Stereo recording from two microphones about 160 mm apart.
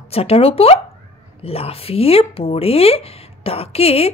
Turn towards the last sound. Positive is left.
turn(degrees=40)  # may be behind; listen again after turning